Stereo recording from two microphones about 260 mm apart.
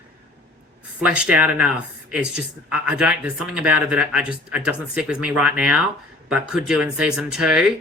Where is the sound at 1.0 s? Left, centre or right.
Centre.